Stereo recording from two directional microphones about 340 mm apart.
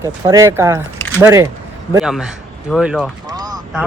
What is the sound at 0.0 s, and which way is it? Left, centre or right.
Speech, centre.